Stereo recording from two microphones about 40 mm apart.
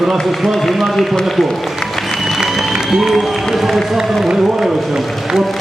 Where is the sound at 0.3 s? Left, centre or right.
Centre.